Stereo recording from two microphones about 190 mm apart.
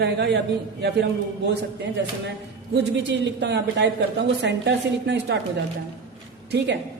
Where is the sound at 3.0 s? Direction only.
65° right (ahead or behind).